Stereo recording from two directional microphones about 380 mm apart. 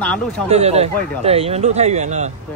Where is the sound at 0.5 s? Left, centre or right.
Centre.